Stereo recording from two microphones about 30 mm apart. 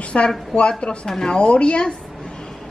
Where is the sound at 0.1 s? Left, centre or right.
Left.